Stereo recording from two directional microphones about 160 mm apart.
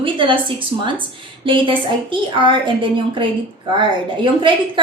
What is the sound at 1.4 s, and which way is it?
Speech, 30° right (ahead or behind).